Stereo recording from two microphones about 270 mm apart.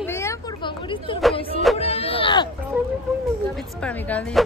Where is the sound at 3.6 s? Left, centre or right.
Centre.